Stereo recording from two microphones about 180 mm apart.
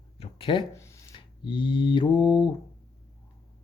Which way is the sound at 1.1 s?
25° left (ahead or behind).